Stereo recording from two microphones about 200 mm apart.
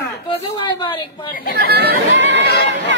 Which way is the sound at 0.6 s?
25° left (ahead or behind).